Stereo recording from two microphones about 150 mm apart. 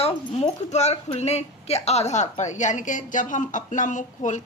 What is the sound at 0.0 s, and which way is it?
Speech, 40° left (ahead or behind).